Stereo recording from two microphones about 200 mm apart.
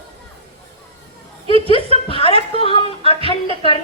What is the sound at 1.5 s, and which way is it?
A woman's voice, 25° left (ahead or behind).